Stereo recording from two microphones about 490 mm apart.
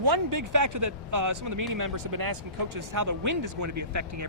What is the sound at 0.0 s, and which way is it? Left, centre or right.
Speech, right.